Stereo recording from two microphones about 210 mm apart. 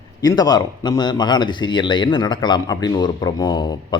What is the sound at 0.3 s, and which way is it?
Speech, 20° left (ahead or behind).